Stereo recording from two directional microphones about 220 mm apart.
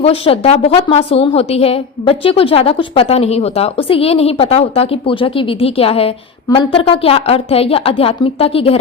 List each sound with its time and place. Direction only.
0.0 s a woman's voice: 25° left (ahead or behind)